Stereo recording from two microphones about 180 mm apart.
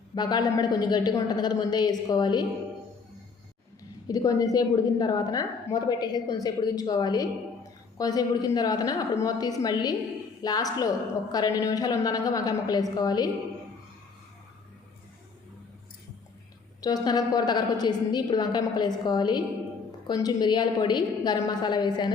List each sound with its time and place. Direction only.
0.1 s a woman's voice: 25° left (ahead or behind)
4.1 s a woman's voice: 20° left (ahead or behind)
16.8 s a woman's voice: 20° left (ahead or behind)